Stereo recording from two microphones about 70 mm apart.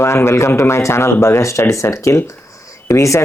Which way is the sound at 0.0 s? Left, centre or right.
Left.